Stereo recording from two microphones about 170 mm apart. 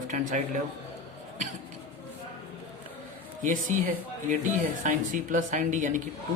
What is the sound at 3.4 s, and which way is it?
Speech, 50° right (ahead or behind).